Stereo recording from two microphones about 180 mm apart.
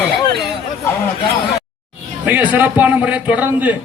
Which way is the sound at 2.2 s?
10° right (ahead or behind).